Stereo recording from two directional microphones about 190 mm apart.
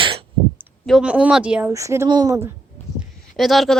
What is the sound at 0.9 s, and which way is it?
A woman's voice, 5° right (ahead or behind).